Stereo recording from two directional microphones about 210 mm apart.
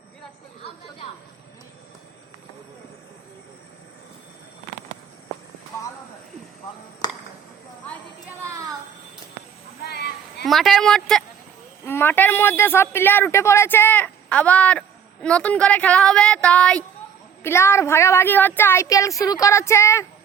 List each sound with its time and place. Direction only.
7.0 s chop: 20° left (ahead or behind)
9.8 s child singing: 50° left (ahead or behind)
10.4 s speech: centre (ahead or behind)